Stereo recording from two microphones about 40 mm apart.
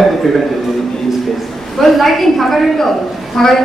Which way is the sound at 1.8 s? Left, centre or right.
Centre.